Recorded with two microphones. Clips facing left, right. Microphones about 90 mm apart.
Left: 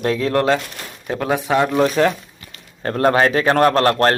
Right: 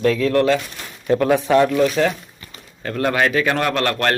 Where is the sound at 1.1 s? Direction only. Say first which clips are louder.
Right 2 dB; 10° left (ahead or behind).